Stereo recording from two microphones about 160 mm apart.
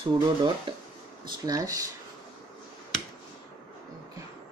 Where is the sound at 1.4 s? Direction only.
20° right (ahead or behind).